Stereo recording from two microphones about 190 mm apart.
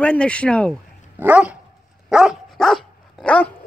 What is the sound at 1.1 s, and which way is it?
Dog, 10° right (ahead or behind).